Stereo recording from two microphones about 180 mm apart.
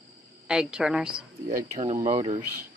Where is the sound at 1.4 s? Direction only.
40° right (ahead or behind).